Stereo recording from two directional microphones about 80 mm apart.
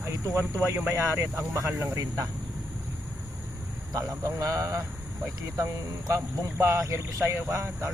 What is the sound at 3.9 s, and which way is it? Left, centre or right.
Speech, right.